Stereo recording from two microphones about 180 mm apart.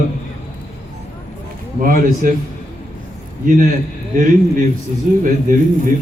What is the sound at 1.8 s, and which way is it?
Speech, 50° right (ahead or behind).